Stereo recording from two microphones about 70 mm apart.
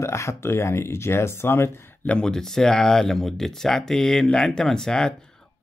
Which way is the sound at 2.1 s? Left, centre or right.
Centre.